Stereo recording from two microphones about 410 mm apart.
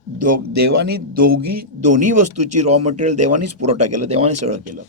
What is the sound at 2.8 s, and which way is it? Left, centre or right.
Speech, centre.